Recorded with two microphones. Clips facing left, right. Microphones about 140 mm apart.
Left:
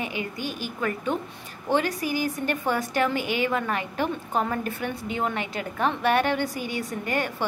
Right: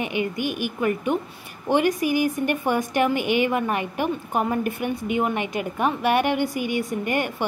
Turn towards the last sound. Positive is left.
turn(degrees=-15)  # may be behind; listen again after turning